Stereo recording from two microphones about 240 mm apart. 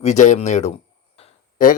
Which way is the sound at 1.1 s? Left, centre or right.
Left.